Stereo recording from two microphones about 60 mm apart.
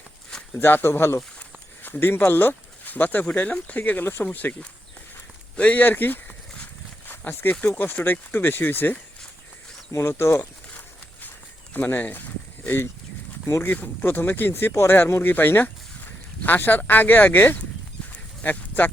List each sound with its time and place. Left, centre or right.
0.5 s speech: left
1.4 s speech: left
5.5 s speech: left
7.1 s a sound: left
7.7 s speech: left
9.9 s speech: left
11.7 s speech: left